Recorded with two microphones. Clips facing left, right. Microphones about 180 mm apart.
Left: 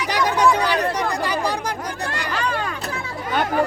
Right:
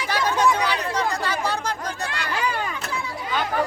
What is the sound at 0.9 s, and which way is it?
Chatter, 15° left (ahead or behind).